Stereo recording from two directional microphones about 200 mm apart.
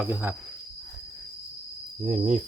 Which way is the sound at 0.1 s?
10° right (ahead or behind).